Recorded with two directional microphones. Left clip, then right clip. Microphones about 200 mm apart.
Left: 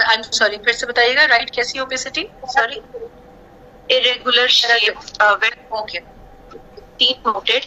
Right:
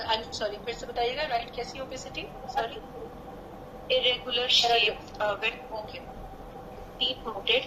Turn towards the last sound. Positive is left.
turn(degrees=50)  # may be behind; listen again after turning